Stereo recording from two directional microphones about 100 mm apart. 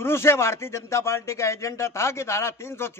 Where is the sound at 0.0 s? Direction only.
25° left (ahead or behind).